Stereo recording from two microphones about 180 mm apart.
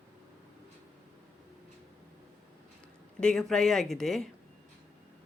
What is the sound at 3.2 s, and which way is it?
Speech, 5° left (ahead or behind).